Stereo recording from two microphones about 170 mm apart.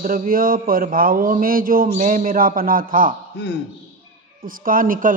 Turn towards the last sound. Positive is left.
turn(degrees=-55)  # may be behind; listen again after turning